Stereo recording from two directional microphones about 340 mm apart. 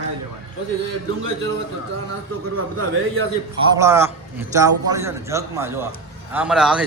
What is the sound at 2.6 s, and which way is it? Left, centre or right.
Speech, right.